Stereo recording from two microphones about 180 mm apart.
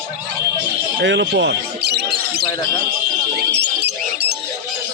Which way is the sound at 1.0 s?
80° right.